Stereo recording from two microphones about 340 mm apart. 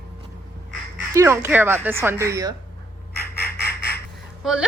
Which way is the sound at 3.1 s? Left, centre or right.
Left.